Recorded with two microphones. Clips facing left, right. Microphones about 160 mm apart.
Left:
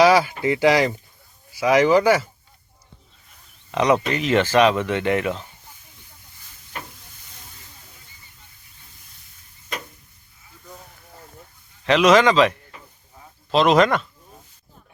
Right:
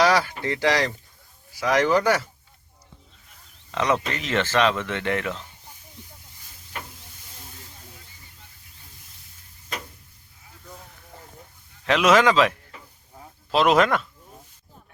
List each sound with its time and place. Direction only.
0.0 s speech: 10° left (ahead or behind)
3.7 s speech: 15° left (ahead or behind)
11.9 s speech: centre (ahead or behind)